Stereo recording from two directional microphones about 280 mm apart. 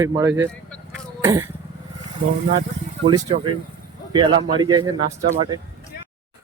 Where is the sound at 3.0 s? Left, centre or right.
Centre.